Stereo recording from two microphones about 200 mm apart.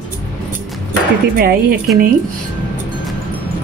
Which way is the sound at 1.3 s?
50° right (ahead or behind).